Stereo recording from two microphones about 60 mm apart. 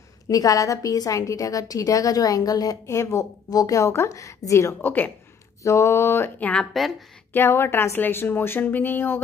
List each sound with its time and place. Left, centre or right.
0.3 s a woman's voice: left
2.9 s a woman's voice: left
3.9 s a woman's voice: left
4.8 s speech: left
5.6 s a sound: left
6.7 s speech: centre
7.3 s speech: left